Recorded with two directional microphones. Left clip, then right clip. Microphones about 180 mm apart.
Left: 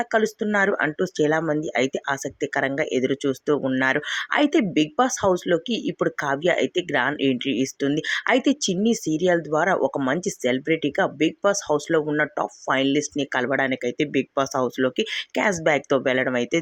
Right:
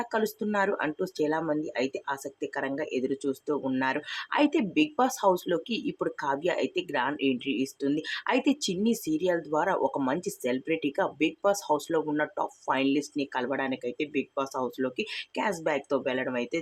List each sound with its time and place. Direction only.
0.0 s speech: 20° left (ahead or behind)